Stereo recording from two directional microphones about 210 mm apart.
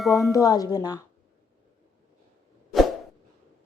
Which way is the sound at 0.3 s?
15° left (ahead or behind).